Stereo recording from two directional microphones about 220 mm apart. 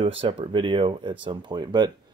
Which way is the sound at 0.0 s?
25° right (ahead or behind).